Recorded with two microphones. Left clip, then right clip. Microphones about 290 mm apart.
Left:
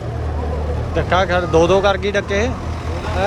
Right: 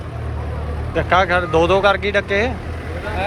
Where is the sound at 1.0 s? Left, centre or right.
Centre.